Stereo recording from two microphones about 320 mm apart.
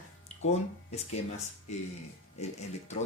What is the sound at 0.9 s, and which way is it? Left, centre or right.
Speech, centre.